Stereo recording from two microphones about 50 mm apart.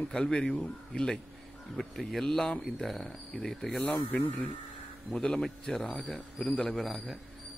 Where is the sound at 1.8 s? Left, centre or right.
Centre.